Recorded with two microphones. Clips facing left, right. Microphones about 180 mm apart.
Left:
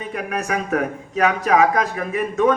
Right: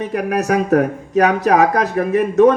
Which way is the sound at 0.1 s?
40° right (ahead or behind).